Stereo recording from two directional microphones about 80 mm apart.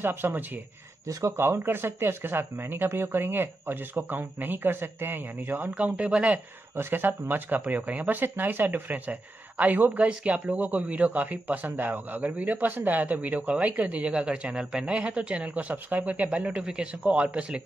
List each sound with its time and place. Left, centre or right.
0.0 s speech: right
5.8 s speech: centre
6.8 s speech: right